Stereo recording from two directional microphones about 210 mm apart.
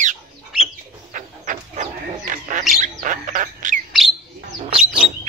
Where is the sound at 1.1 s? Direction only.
40° right (ahead or behind).